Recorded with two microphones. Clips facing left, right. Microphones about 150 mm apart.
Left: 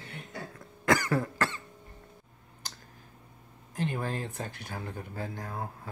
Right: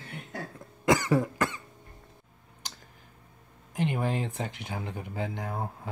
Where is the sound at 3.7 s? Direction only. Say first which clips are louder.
Right 4 dB; 15° right (ahead or behind).